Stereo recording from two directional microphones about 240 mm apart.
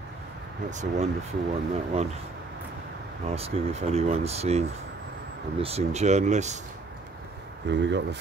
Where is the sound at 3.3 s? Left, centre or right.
Right.